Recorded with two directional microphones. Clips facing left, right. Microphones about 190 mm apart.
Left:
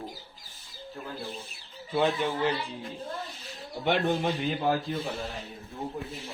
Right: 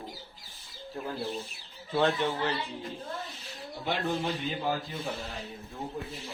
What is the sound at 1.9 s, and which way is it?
Speech, 10° left (ahead or behind).